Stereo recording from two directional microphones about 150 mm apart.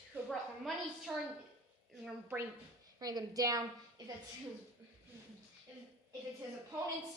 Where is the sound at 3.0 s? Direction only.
25° right (ahead or behind).